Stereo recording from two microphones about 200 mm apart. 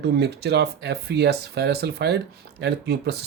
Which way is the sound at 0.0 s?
55° right (ahead or behind).